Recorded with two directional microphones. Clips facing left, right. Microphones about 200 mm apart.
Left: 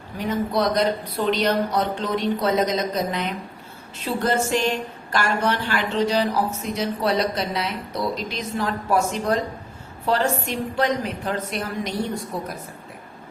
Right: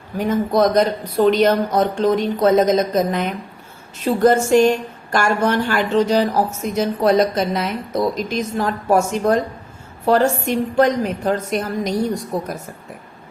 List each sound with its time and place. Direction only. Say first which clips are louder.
0.2 s a woman's voice: right 6 dB; 45° right (ahead or behind)